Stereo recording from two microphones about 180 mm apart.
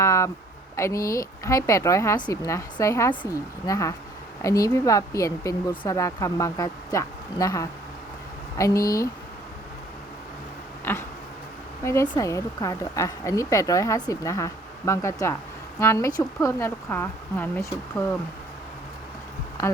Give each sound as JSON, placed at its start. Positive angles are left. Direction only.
{"t": 0.0, "sound": "a sound", "side_deg": 15}
{"t": 0.8, "sound": "speech", "side_deg": 15}
{"t": 10.9, "sound": "speech", "side_deg": 10}